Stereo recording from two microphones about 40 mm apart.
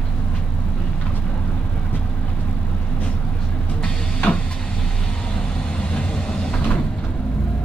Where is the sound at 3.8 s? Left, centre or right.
Left.